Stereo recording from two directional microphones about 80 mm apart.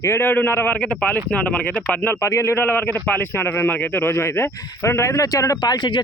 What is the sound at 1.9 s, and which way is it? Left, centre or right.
Speech, left.